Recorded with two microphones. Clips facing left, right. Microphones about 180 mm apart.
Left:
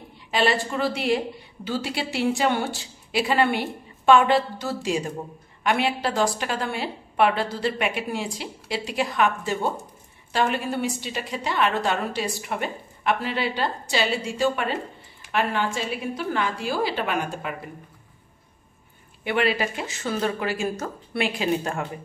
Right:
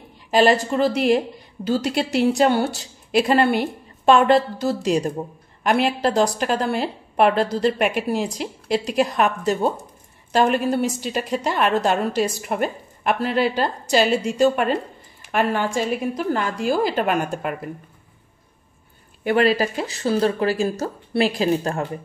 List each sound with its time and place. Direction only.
0.3 s a woman's voice: 45° right (ahead or behind)
19.2 s a woman's voice: 40° right (ahead or behind)